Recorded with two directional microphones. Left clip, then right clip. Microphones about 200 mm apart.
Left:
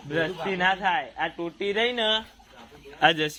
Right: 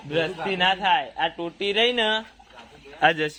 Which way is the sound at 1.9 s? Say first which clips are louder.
Right 2 dB; 30° right (ahead or behind).